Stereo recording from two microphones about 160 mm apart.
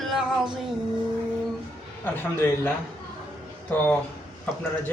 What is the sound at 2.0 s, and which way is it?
Speech, 15° left (ahead or behind).